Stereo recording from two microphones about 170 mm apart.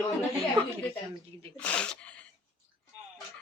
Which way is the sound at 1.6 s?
5° left (ahead or behind).